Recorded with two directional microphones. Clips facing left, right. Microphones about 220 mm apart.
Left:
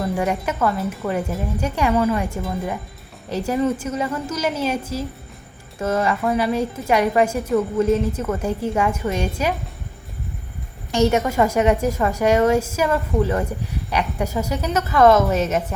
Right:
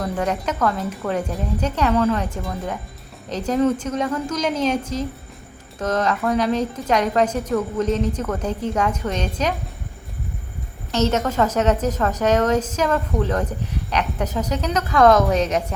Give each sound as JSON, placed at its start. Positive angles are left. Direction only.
{"t": 0.0, "sound": "a woman's voice", "side_deg": 10}
{"t": 5.8, "sound": "a woman's voice", "side_deg": 10}
{"t": 10.9, "sound": "a woman's voice", "side_deg": 10}